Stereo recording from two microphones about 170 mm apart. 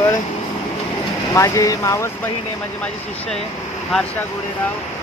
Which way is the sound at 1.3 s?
20° left (ahead or behind).